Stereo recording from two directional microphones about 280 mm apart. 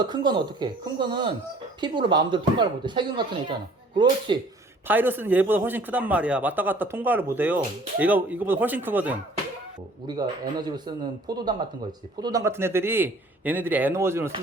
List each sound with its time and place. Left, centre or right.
0.0 s speech: centre
4.3 s speech: centre